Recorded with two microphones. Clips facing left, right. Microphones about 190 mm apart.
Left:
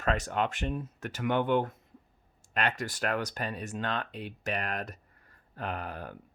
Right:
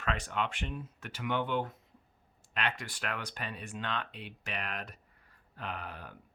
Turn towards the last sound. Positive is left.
turn(degrees=45)  # may be behind; listen again after turning